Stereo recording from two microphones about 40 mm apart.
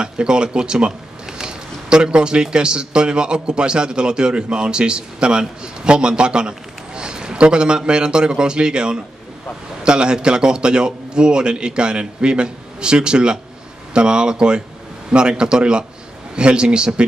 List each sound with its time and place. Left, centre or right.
0.0 s a man's voice: right
7.0 s a sound: centre
7.3 s a man's voice: right